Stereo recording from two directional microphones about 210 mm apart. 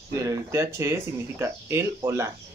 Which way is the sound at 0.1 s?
15° right (ahead or behind).